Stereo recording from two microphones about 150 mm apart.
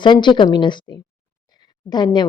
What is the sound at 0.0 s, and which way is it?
A woman's voice, 30° left (ahead or behind).